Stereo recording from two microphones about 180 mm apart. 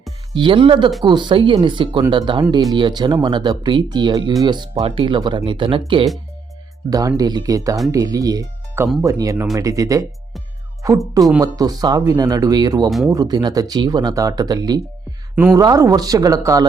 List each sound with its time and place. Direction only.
0.3 s speech: 25° right (ahead or behind)
7.2 s speech: 20° right (ahead or behind)